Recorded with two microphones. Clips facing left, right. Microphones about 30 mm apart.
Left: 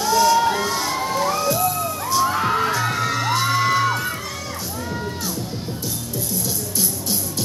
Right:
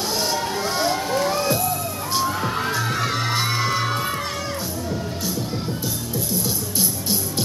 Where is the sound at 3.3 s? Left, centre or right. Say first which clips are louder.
Left 3 dB; right.